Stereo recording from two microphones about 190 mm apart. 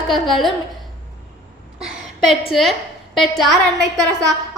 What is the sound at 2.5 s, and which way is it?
A woman's voice, centre (ahead or behind).